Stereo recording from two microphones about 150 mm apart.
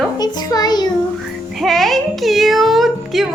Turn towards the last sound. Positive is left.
turn(degrees=0)  # may be behind; listen again after turning